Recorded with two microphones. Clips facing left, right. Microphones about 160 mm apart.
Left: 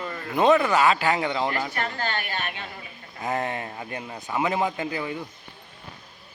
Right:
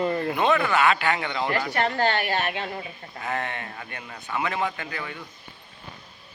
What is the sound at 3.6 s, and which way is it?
Speech, 20° left (ahead or behind).